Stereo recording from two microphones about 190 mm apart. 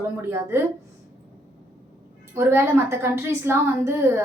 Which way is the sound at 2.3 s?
15° right (ahead or behind).